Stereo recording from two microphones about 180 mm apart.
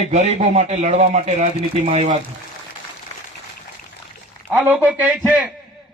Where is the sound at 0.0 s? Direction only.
35° right (ahead or behind).